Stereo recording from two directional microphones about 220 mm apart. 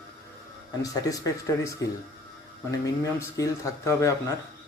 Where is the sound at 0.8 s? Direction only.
15° left (ahead or behind).